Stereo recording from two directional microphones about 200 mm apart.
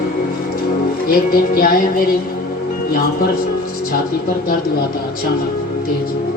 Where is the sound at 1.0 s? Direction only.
50° left (ahead or behind).